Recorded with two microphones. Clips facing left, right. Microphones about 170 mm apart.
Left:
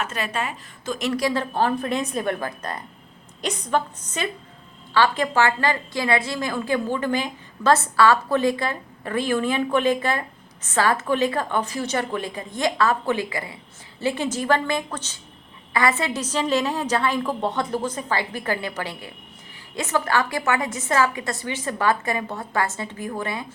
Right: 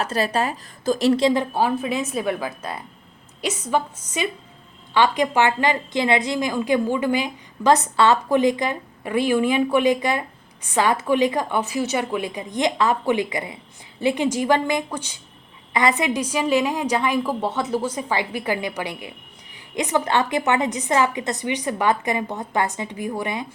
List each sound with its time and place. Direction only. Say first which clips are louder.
0.0 s a woman's voice: right 5 dB; 35° right (ahead or behind); by 23.5 s 15° right (ahead or behind)